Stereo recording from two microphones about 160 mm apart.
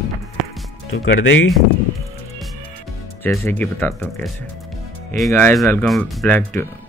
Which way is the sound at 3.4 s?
15° left (ahead or behind).